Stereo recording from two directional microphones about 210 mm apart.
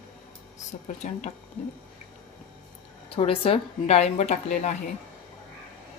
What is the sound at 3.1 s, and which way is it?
Speech, 25° left (ahead or behind).